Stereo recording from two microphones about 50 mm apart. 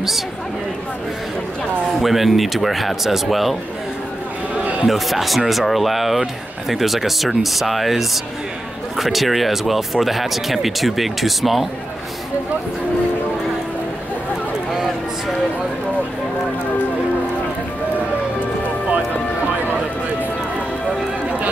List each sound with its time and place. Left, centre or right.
2.0 s speech: centre
4.8 s speech: centre